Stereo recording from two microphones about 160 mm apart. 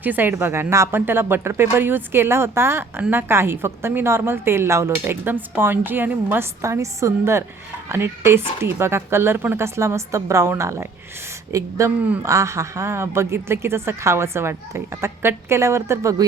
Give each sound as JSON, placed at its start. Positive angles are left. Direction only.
{"t": 0.0, "sound": "speech", "side_deg": -10}